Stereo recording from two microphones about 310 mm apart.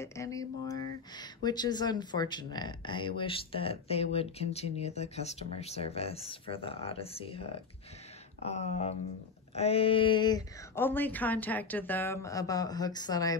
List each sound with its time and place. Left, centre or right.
0.0 s speech: centre